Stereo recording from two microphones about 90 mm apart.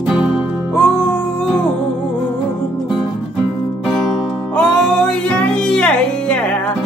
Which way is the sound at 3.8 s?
5° right (ahead or behind).